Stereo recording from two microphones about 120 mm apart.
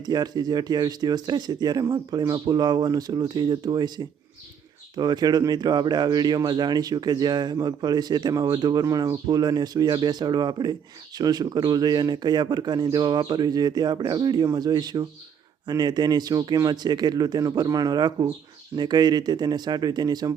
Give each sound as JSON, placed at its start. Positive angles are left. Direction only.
{"t": 0.0, "sound": "speech", "side_deg": -35}